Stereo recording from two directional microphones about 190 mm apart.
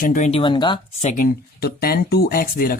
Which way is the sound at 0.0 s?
40° left (ahead or behind).